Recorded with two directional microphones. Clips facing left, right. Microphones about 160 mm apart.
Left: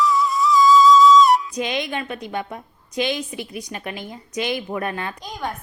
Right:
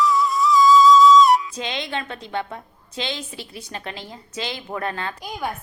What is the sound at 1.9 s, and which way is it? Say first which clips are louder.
A woman's voice: left 1 dB; 15° left (ahead or behind).